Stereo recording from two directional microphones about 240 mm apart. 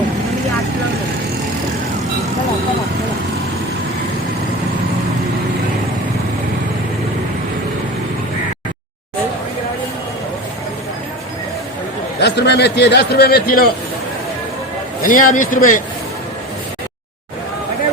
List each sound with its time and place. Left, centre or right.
12.2 s a man's voice: left
15.0 s speech: left